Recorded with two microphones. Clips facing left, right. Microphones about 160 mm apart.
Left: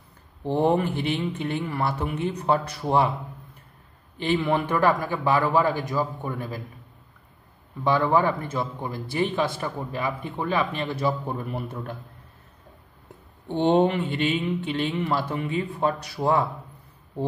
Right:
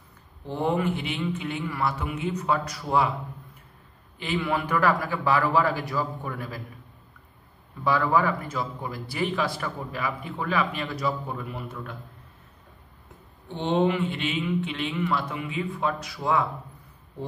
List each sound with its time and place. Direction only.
0.6 s speech: 35° left (ahead or behind)
4.2 s a man's voice: 30° left (ahead or behind)
7.8 s a man's voice: 25° left (ahead or behind)
13.7 s speech: 40° left (ahead or behind)